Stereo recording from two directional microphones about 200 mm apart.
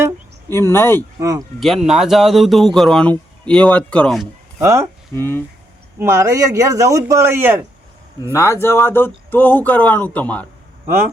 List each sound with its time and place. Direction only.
0.5 s speech: 10° left (ahead or behind)
1.2 s speech: 15° right (ahead or behind)
1.5 s speech: centre (ahead or behind)
4.6 s speech: 15° right (ahead or behind)
5.1 s speech: 10° left (ahead or behind)
6.0 s speech: 15° right (ahead or behind)
8.3 s speech: 15° left (ahead or behind)